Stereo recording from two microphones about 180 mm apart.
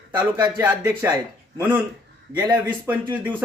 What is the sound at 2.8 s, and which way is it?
Speech, 10° right (ahead or behind).